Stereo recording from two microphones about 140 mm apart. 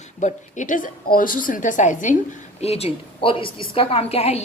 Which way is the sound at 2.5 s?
45° left (ahead or behind).